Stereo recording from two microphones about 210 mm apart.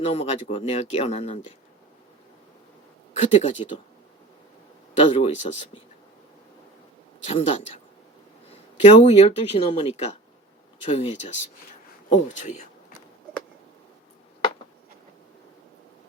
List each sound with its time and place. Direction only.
0.0 s speech: 30° left (ahead or behind)
3.2 s speech: 30° left (ahead or behind)
4.9 s speech: 25° left (ahead or behind)
7.3 s speech: 25° left (ahead or behind)
8.8 s speech: 30° left (ahead or behind)